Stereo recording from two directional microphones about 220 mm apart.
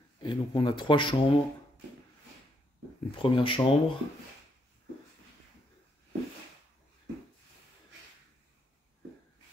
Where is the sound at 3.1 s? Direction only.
20° left (ahead or behind).